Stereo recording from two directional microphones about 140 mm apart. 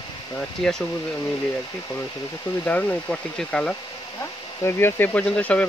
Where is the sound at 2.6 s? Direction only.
10° left (ahead or behind).